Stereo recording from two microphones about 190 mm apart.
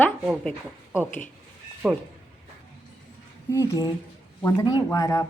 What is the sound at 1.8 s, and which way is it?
Speech, centre (ahead or behind).